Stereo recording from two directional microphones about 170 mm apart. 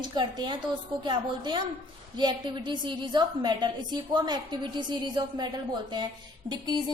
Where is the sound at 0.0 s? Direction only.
25° right (ahead or behind).